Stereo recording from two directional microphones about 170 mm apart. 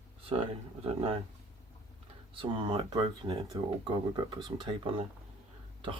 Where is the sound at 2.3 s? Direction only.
30° right (ahead or behind).